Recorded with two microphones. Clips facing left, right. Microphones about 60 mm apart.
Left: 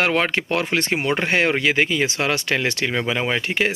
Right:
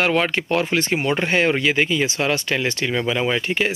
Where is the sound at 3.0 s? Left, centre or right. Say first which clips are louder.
Right 3 dB; left.